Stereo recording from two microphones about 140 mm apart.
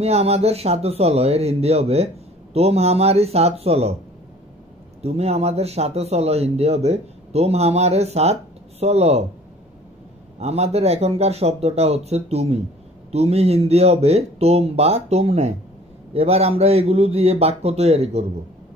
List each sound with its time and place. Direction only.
0.0 s speech: 50° right (ahead or behind)
5.0 s speech: 50° right (ahead or behind)
10.4 s speech: 50° right (ahead or behind)